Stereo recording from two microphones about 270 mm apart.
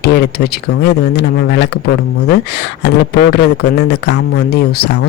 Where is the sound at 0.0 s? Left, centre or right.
Left.